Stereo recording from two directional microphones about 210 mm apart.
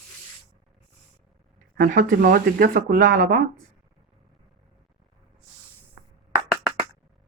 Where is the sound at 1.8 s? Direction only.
40° right (ahead or behind).